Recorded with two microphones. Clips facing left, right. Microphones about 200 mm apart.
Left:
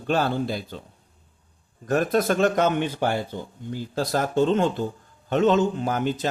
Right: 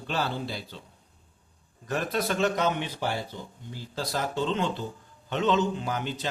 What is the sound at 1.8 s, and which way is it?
Speech, 45° left (ahead or behind).